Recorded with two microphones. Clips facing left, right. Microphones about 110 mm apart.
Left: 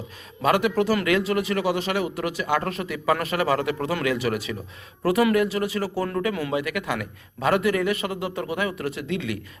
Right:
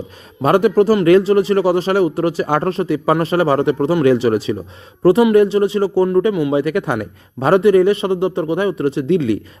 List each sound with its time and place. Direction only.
0.4 s a man's voice: 35° right (ahead or behind)